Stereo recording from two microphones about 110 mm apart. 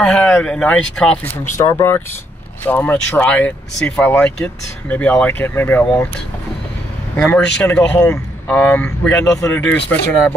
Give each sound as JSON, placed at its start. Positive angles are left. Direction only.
{"t": 0.0, "sound": "speech", "side_deg": 10}
{"t": 7.2, "sound": "speech", "side_deg": 15}
{"t": 9.2, "sound": "speech", "side_deg": 30}
{"t": 9.5, "sound": "speech", "side_deg": 15}